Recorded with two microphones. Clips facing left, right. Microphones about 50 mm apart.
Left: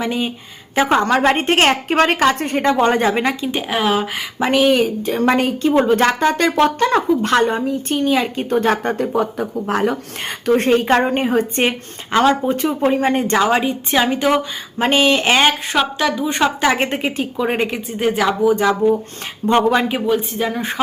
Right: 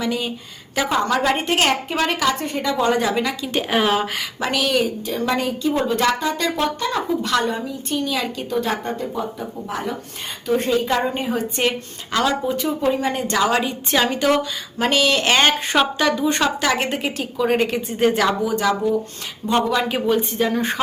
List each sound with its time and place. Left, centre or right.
0.0 s a woman's voice: left
0.8 s speech: left
3.7 s speech: centre
4.4 s a woman's voice: left
14.8 s a woman's voice: left
15.7 s speech: centre
16.6 s a woman's voice: left
17.8 s speech: centre
18.4 s a woman's voice: left
19.9 s speech: centre